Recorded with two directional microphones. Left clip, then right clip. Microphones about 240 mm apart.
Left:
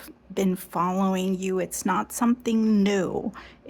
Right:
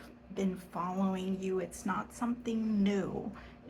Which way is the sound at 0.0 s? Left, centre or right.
Left.